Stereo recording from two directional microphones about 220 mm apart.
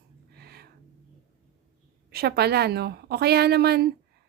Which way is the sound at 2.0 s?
45° right (ahead or behind).